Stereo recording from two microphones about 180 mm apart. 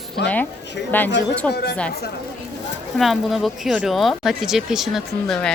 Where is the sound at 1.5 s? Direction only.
65° left (ahead or behind).